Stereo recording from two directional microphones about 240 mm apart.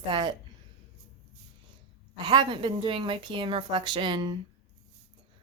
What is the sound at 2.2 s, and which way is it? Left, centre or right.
Speech, centre.